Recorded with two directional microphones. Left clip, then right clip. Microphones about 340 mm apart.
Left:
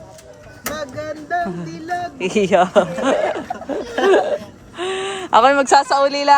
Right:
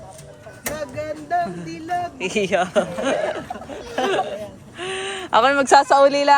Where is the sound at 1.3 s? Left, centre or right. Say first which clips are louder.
Left 1 dB; centre.